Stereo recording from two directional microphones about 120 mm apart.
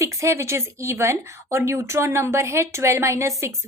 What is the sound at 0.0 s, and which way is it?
Speech, 25° right (ahead or behind).